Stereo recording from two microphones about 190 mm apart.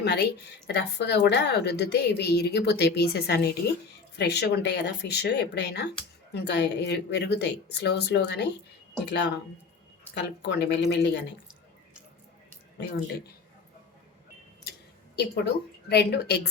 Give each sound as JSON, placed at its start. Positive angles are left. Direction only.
{"t": 0.0, "sound": "a woman's voice", "side_deg": 60}
{"t": 12.8, "sound": "a woman's voice", "side_deg": 60}
{"t": 15.1, "sound": "a woman's voice", "side_deg": 60}